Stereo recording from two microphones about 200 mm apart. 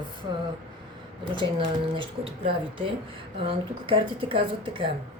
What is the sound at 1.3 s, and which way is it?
Speech, 25° right (ahead or behind).